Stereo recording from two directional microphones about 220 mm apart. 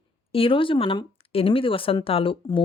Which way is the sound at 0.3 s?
25° left (ahead or behind).